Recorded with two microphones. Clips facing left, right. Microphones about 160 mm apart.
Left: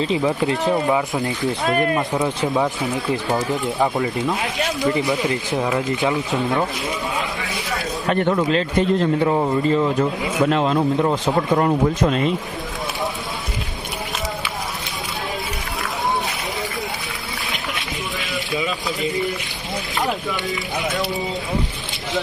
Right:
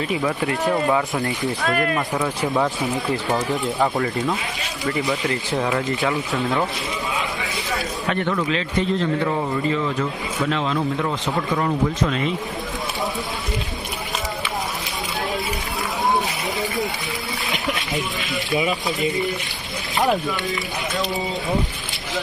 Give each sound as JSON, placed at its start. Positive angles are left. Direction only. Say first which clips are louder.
{"t": 0.0, "sound": "speech", "louder": "left 3 dB", "side_deg": 25}
{"t": 1.1, "sound": "speech", "louder": "left 1 dB", "side_deg": 20}
{"t": 4.9, "sound": "speech", "louder": "left 1 dB", "side_deg": 20}
{"t": 8.1, "sound": "speech", "louder": "left 5 dB", "side_deg": 40}
{"t": 10.5, "sound": "speech", "louder": "left 3 dB", "side_deg": 45}
{"t": 10.8, "sound": "speech", "louder": "left 5 dB", "side_deg": 30}
{"t": 11.1, "sound": "speech", "louder": "left 5 dB", "side_deg": 40}
{"t": 18.5, "sound": "speech", "louder": "right 3 dB", "side_deg": -20}
{"t": 20.5, "sound": "speech", "louder": "left 2 dB", "side_deg": 0}